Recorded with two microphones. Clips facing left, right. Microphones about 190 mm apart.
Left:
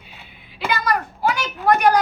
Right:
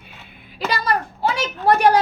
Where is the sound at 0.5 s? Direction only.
35° right (ahead or behind).